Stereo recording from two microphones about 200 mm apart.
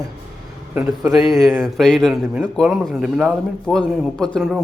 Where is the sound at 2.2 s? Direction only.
10° right (ahead or behind).